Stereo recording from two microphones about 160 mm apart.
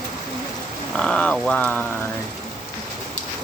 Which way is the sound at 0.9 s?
5° left (ahead or behind).